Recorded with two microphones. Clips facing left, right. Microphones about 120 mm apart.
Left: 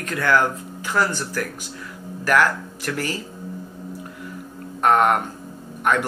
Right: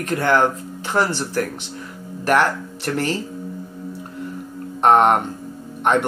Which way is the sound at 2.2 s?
25° right (ahead or behind).